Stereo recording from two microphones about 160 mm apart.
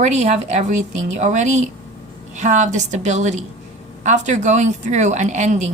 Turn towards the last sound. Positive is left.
turn(degrees=-45)  # may be behind; listen again after turning